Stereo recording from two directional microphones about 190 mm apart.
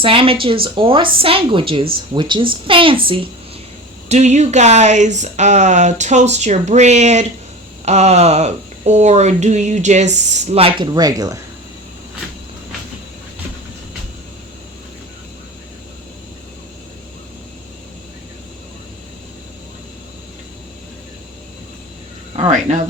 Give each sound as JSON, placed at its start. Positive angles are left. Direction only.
{"t": 0.0, "sound": "a woman's voice", "side_deg": -30}
{"t": 22.4, "sound": "speech", "side_deg": -40}